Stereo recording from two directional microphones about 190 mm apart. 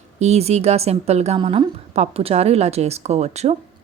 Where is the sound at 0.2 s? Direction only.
35° right (ahead or behind).